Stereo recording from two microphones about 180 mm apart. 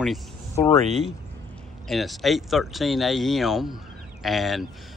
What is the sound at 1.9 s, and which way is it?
Speech, centre (ahead or behind).